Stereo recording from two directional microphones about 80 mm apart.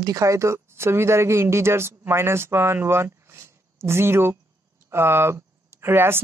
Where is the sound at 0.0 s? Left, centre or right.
Right.